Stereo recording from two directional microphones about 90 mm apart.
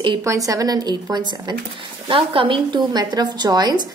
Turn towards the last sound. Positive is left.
turn(degrees=-50)  # may be behind; listen again after turning